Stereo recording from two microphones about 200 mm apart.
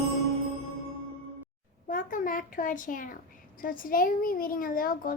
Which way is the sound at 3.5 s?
45° left (ahead or behind).